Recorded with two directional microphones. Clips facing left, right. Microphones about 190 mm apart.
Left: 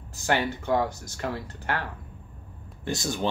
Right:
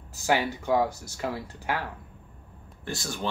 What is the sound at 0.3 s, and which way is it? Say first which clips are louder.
Speech: even; 5° right (ahead or behind).